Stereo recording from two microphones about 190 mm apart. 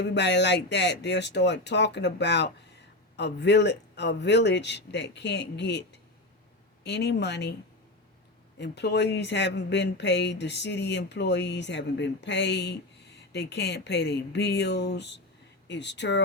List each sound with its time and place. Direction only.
0.0 s speech: 65° left (ahead or behind)
6.8 s speech: 60° left (ahead or behind)
8.5 s speech: 65° left (ahead or behind)